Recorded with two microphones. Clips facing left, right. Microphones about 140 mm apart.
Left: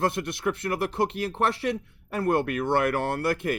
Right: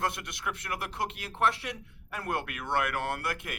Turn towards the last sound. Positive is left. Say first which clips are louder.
# left 8 dB
turn(degrees=35)  # may be behind; listen again after turning